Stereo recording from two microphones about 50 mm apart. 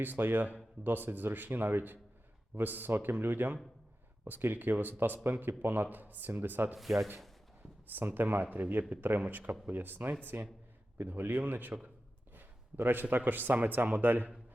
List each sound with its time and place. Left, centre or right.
0.0 s speech: right
7.9 s a man's voice: right